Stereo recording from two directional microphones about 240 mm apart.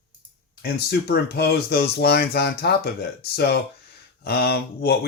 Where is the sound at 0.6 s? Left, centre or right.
Left.